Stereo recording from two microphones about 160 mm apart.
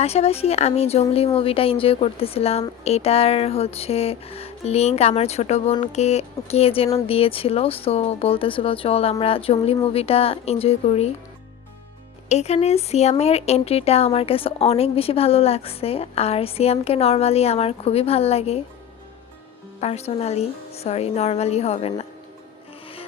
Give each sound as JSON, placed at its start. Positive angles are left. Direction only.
{"t": 0.0, "sound": "speech", "side_deg": 40}
{"t": 12.3, "sound": "speech", "side_deg": 45}
{"t": 19.8, "sound": "speech", "side_deg": 40}